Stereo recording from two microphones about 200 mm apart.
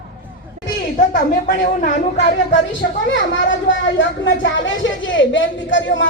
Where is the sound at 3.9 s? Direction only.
65° left (ahead or behind).